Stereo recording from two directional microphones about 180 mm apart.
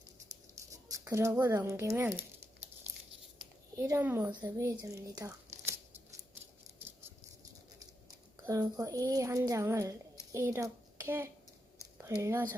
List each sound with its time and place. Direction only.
0.5 s a sound: 20° right (ahead or behind)
3.8 s a child's voice: 15° right (ahead or behind)
8.4 s a child's voice: 20° right (ahead or behind)